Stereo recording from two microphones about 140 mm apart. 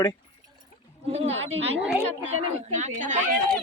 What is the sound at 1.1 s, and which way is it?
A man's voice, 50° right (ahead or behind).